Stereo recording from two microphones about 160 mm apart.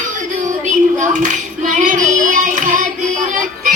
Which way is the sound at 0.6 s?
50° right (ahead or behind).